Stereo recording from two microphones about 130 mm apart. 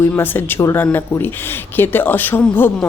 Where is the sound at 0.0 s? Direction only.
15° left (ahead or behind).